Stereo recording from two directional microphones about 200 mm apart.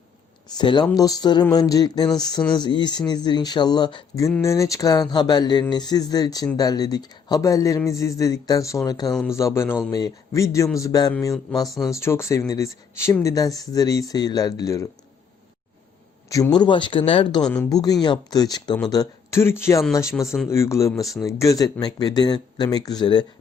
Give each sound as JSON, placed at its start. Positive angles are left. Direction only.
{"t": 0.5, "sound": "speech", "side_deg": 20}
{"t": 16.3, "sound": "speech", "side_deg": 20}
{"t": 17.4, "sound": "speech", "side_deg": 5}
{"t": 17.7, "sound": "speech", "side_deg": 20}